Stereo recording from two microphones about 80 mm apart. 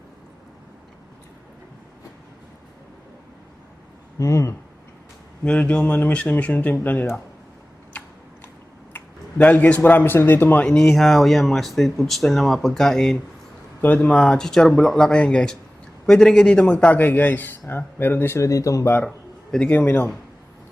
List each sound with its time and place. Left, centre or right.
4.2 s speech: left
5.5 s a man's voice: centre
9.4 s a man's voice: centre
10.7 s speech: centre
13.8 s a man's voice: centre; by 18.9 s left
19.0 s a sound: centre
19.6 s a man's voice: left